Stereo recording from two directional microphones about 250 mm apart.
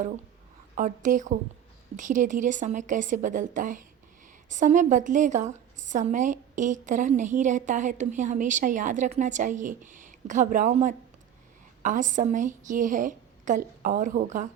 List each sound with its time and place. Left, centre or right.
0.8 s a woman's voice: right